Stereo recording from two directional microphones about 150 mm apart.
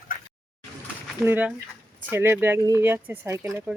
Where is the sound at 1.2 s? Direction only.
10° right (ahead or behind).